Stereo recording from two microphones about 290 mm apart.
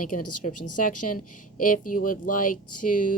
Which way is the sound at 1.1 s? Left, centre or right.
Left.